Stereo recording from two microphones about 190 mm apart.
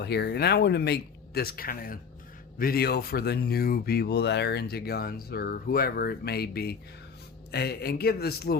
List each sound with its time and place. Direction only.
0.0 s speech: 60° left (ahead or behind)